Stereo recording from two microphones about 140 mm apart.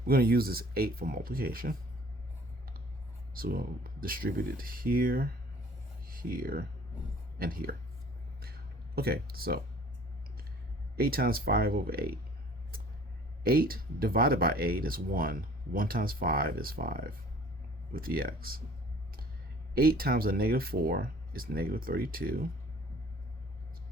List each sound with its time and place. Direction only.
0.0 s speech: 90° right
3.3 s speech: 90° right
9.0 s speech: 90° right
10.9 s speech: 90° right
13.4 s speech: 90° right
19.7 s speech: 90° right